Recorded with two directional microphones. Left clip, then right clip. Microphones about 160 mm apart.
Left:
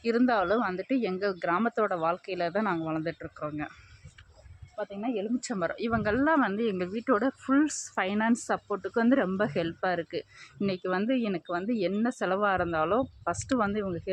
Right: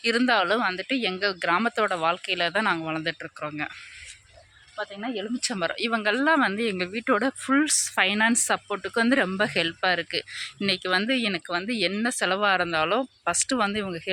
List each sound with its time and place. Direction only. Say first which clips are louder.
0.0 s speech: right 4 dB; 5° right (ahead or behind)
1.4 s speech: right 4 dB; 15° right (ahead or behind)
2.4 s speech: right 4 dB; 5° right (ahead or behind)
4.9 s speech: left 1 dB; 15° right (ahead or behind)
7.6 s speech: right 6 dB; 10° right (ahead or behind)